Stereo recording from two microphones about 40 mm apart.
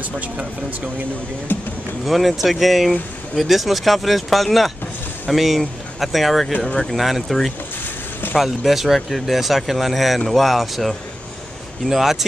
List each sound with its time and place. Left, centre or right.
1.5 s speech: left
2.0 s speech: centre
6.6 s speech: centre